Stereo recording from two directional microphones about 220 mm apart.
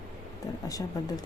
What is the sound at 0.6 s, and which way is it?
Speech, 15° left (ahead or behind).